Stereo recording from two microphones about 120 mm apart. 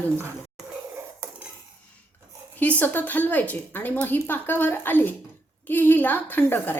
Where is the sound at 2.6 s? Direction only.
15° left (ahead or behind).